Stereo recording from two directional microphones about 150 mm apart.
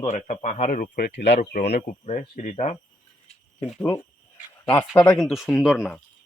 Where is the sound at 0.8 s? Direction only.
75° left (ahead or behind).